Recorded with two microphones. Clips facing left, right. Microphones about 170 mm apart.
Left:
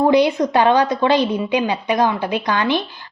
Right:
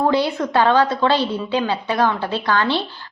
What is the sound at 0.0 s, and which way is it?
A woman's voice, 15° left (ahead or behind).